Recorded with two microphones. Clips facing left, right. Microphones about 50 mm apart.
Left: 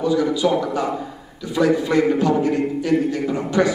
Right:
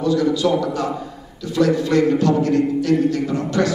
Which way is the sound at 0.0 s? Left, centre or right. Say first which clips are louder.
Right 1 dB; centre.